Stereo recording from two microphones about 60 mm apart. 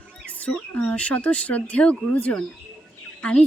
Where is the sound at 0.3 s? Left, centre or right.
Left.